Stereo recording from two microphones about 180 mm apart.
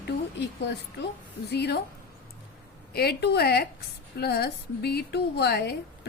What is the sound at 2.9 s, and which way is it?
Speech, 65° left (ahead or behind).